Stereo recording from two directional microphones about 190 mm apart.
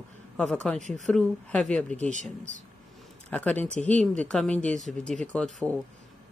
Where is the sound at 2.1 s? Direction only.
40° right (ahead or behind).